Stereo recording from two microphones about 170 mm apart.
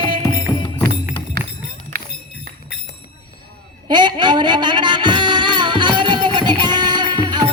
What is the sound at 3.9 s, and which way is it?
Music, 25° right (ahead or behind).